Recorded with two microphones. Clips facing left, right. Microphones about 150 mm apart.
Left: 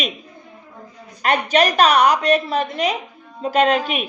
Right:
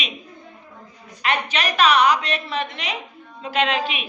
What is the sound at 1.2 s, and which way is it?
A woman's voice, 45° left (ahead or behind).